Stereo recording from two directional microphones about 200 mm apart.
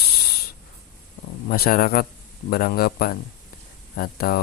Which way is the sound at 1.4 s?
45° left (ahead or behind).